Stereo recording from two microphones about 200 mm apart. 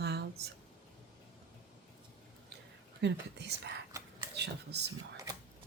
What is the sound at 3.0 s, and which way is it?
Speech, 60° right (ahead or behind).